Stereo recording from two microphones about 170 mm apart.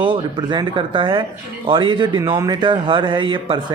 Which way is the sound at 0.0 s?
30° right (ahead or behind).